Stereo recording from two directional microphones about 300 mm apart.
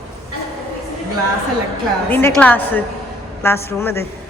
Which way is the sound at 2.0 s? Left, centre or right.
Centre.